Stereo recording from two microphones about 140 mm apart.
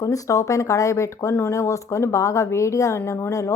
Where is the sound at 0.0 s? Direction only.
25° left (ahead or behind).